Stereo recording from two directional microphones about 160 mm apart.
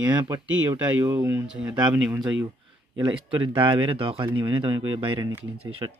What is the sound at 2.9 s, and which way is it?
Speech, 30° right (ahead or behind).